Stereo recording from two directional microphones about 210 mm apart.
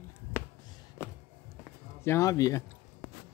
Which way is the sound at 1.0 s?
10° left (ahead or behind).